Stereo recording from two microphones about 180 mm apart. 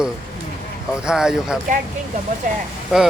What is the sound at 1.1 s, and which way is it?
Speech, 5° right (ahead or behind).